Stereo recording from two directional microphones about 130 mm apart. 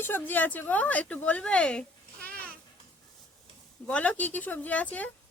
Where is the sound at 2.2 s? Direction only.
10° left (ahead or behind).